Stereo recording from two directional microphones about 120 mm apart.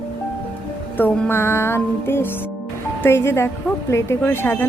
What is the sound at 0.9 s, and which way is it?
A woman's voice, 15° left (ahead or behind).